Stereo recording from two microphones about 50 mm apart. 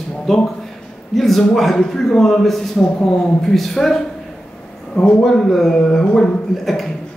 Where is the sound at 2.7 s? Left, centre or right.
Centre.